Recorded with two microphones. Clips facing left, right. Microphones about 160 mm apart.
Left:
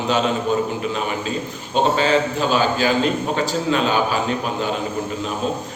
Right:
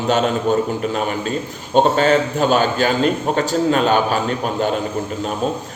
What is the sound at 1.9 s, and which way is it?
Speech, 45° right (ahead or behind).